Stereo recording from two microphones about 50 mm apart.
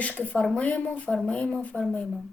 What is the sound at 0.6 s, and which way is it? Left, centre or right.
Speech, left.